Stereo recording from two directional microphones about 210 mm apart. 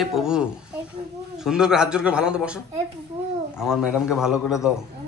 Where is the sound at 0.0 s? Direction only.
Centre (ahead or behind).